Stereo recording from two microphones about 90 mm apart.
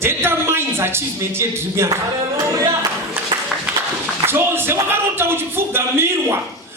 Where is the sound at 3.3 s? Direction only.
50° right (ahead or behind).